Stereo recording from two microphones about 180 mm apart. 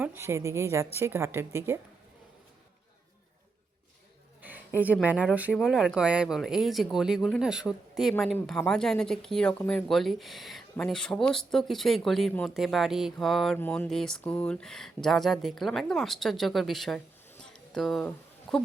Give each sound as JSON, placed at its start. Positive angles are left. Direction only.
{"t": 0.0, "sound": "speech", "side_deg": -10}
{"t": 4.4, "sound": "speech", "side_deg": -10}